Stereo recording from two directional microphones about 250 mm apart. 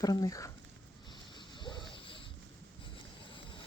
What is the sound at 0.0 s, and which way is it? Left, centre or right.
Speech, centre.